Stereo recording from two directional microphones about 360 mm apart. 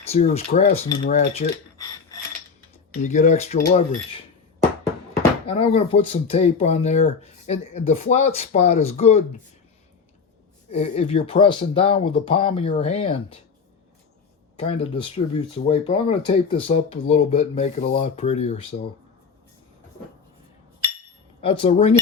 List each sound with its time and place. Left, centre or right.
0.1 s speech: centre
1.2 s cutlery: centre
2.9 s speech: centre
5.5 s speech: centre
10.7 s speech: centre
14.6 s speech: centre
21.4 s speech: centre